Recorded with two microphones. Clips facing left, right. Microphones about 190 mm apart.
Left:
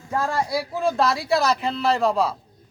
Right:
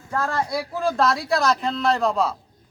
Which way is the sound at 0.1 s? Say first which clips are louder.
Left 1 dB; 15° left (ahead or behind).